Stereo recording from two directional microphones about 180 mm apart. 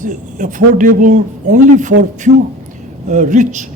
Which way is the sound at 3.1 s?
45° right (ahead or behind).